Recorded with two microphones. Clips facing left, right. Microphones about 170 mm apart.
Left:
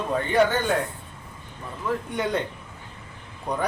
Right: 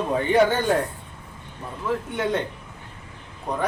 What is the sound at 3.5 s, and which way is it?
Speech, centre (ahead or behind).